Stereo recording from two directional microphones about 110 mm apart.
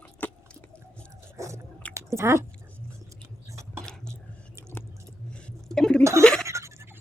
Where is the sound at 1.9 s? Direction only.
25° right (ahead or behind).